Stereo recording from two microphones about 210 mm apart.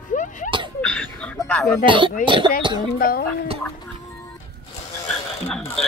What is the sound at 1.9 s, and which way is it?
Speech, 25° right (ahead or behind).